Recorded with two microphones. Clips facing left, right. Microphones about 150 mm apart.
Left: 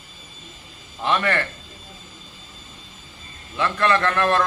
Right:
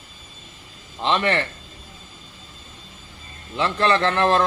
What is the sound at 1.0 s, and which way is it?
Speech, 25° right (ahead or behind).